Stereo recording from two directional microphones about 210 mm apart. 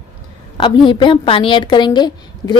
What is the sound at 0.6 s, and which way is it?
A woman's voice, 25° left (ahead or behind).